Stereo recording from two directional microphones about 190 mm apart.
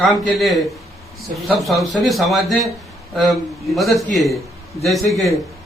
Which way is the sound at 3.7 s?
Centre (ahead or behind).